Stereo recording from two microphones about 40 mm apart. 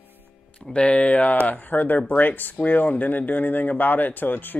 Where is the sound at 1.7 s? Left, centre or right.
Left.